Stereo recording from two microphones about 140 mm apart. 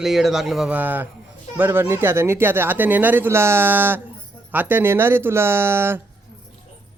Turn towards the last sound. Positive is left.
turn(degrees=-15)  # may be behind; listen again after turning